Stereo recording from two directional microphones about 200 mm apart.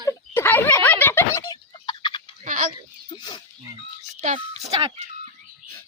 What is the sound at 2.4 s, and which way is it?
Chicken, 40° right (ahead or behind).